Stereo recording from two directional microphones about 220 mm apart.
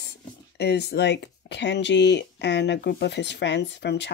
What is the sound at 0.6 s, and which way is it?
Speech, 50° left (ahead or behind).